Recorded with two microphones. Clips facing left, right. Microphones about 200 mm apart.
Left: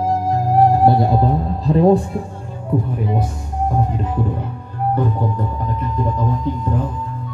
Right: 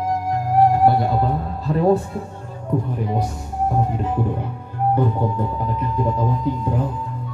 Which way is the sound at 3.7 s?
5° right (ahead or behind).